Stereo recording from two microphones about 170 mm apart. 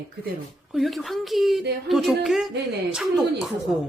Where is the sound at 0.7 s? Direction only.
Centre (ahead or behind).